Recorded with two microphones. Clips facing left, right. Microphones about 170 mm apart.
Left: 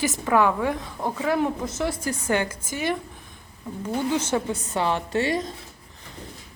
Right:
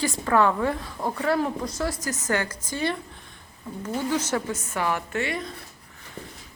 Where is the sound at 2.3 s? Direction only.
20° left (ahead or behind).